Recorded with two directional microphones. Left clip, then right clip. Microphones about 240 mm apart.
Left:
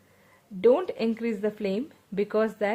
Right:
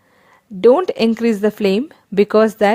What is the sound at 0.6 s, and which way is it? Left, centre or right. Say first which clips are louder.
A woman's voice: right 10 dB; right.